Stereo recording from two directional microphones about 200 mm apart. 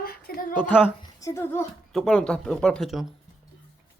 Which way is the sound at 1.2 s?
15° left (ahead or behind).